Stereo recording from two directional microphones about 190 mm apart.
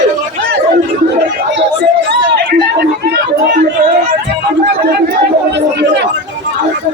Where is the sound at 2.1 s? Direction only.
60° right (ahead or behind).